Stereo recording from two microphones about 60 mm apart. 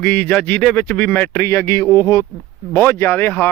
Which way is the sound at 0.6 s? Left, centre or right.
Centre.